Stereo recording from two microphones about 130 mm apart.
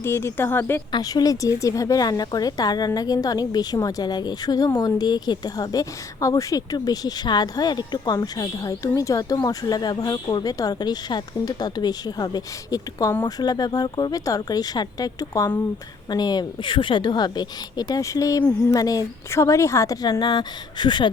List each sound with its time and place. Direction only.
0.0 s speech: 20° left (ahead or behind)
0.9 s a woman's voice: 30° left (ahead or behind)